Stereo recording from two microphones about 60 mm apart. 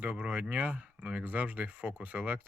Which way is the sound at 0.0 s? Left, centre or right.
Right.